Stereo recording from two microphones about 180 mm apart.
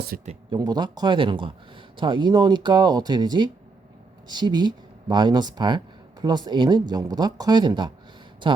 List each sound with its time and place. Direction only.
0.1 s speech: 55° right (ahead or behind)
0.5 s speech: 25° right (ahead or behind)